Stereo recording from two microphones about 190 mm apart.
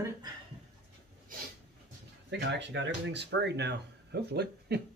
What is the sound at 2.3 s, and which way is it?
Speech, 65° right (ahead or behind).